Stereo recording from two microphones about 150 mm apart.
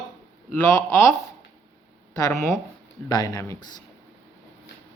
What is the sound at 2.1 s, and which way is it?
Speech, 25° left (ahead or behind).